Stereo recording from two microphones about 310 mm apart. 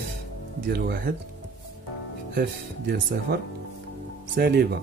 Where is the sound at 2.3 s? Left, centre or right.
Right.